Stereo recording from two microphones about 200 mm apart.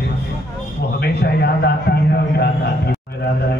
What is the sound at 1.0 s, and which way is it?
A man's voice, 55° left (ahead or behind).